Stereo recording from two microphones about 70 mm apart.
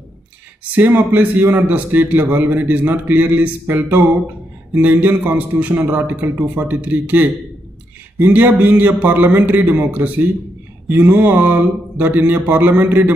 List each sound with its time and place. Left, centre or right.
0.7 s a man's voice: right